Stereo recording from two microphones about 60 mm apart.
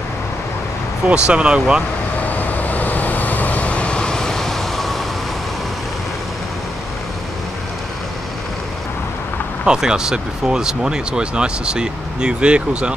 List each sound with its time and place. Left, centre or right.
1.0 s speech: centre
2.2 s vehicle: left; by 5.0 s centre
9.7 s speech: centre